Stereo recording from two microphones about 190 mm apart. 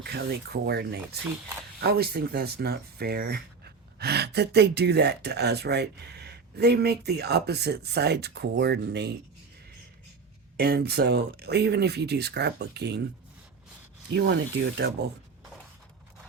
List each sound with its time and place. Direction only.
0.0 s speech: 60° right (ahead or behind)
10.6 s speech: 55° right (ahead or behind)
14.2 s speech: 60° right (ahead or behind)